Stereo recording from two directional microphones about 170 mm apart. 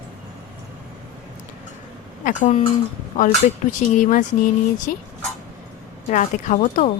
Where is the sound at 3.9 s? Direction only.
50° left (ahead or behind).